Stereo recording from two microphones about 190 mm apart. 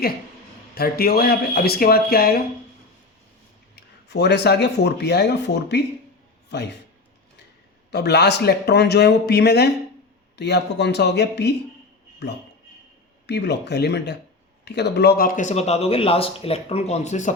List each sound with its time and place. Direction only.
0.8 s speech: 55° left (ahead or behind)
3.8 s speech: 60° left (ahead or behind)
7.9 s speech: 60° left (ahead or behind)
13.2 s speech: 60° left (ahead or behind); by 17.3 s 40° left (ahead or behind)